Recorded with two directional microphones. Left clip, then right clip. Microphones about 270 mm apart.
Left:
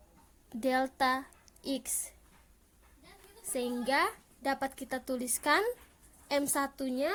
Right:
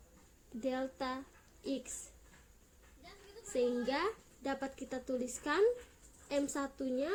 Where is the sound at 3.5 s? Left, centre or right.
Left.